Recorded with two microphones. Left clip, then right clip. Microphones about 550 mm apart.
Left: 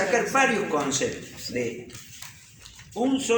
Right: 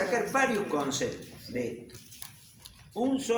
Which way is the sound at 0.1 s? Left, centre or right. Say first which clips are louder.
Left 7 dB; right.